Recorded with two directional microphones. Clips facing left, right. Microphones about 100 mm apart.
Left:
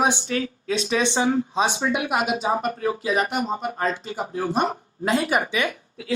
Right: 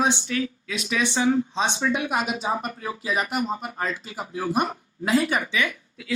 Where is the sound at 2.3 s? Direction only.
40° left (ahead or behind).